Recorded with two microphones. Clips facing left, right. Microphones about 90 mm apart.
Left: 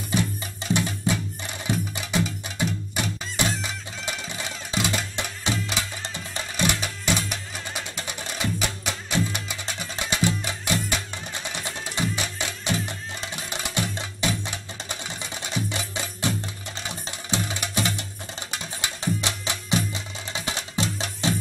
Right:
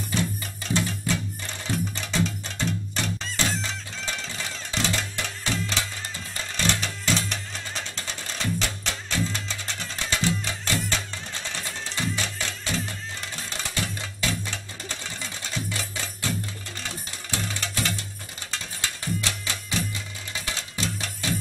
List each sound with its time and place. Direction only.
0.1 s music: 15° left (ahead or behind)